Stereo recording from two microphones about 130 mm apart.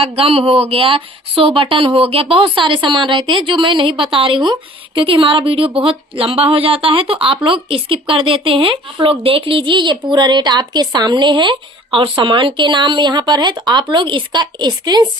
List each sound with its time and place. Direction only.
0.2 s a woman's voice: 45° right (ahead or behind)